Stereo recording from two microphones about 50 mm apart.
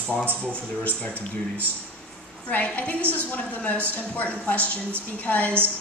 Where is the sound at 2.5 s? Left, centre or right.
Left.